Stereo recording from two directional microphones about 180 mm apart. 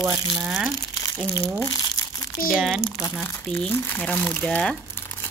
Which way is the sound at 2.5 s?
5° right (ahead or behind).